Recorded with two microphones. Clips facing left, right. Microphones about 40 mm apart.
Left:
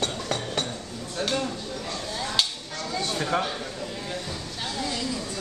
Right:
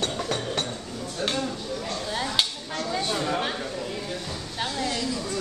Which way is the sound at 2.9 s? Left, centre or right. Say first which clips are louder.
Right 2 dB; right.